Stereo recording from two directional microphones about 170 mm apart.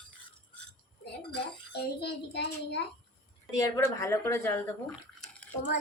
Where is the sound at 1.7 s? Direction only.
75° left (ahead or behind).